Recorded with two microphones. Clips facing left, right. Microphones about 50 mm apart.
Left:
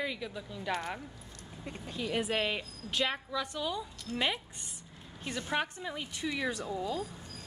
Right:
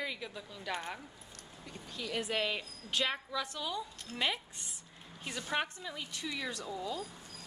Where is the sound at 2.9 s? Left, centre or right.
Centre.